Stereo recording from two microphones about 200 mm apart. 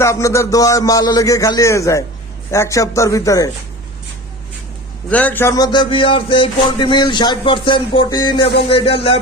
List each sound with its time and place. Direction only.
0.0 s speech: 15° left (ahead or behind)
5.0 s speech: 5° left (ahead or behind); by 9.2 s 30° left (ahead or behind)